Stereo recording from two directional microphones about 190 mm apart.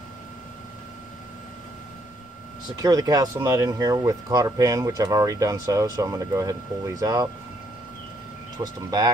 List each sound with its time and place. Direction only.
2.8 s speech: 20° right (ahead or behind)
8.5 s speech: 20° right (ahead or behind)